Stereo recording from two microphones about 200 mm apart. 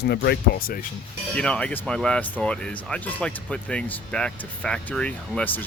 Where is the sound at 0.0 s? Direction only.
55° left (ahead or behind).